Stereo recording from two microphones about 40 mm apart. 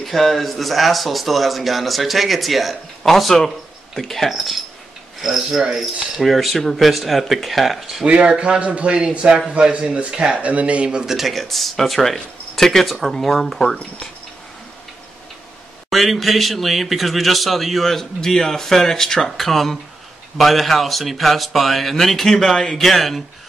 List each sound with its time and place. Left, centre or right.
0.0 s speech: centre
7.8 s speech: centre
8.1 s a man's voice: right
11.1 s speech: centre
15.9 s speech: centre